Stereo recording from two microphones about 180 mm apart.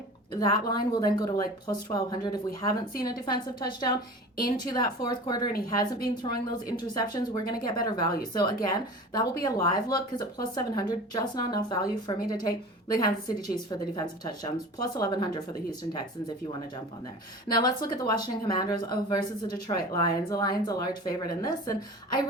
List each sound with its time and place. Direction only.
0.3 s speech: 20° left (ahead or behind)
17.5 s speech: 25° left (ahead or behind)